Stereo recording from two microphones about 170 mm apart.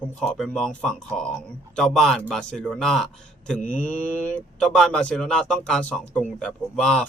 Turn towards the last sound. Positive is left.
turn(degrees=5)  # may be behind; listen again after turning